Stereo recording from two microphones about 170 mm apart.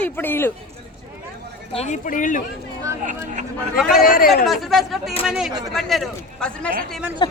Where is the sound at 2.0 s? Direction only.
50° left (ahead or behind).